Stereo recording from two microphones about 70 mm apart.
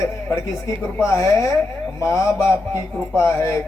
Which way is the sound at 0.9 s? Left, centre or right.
Left.